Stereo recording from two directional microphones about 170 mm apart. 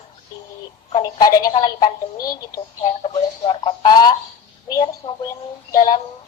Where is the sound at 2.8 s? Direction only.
30° left (ahead or behind).